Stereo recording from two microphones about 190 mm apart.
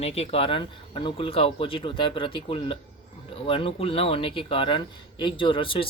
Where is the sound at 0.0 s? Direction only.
35° left (ahead or behind).